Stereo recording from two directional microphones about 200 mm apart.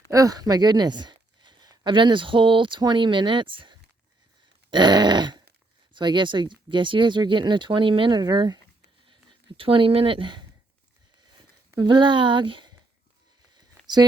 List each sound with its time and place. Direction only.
0.1 s a woman's voice: 15° right (ahead or behind)
9.6 s speech: 25° right (ahead or behind)
11.7 s speech: 20° right (ahead or behind)
13.6 s a sound: 20° right (ahead or behind)